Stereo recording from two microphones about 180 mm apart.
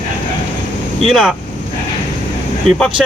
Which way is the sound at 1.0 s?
Centre (ahead or behind).